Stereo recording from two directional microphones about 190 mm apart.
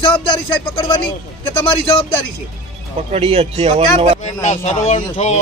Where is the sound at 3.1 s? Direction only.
30° right (ahead or behind).